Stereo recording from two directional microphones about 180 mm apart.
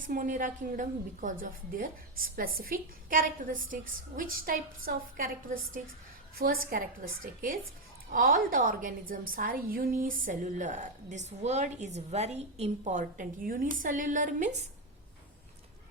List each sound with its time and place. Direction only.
0.1 s a woman's voice: 45° right (ahead or behind)
6.4 s a woman's voice: 55° right (ahead or behind)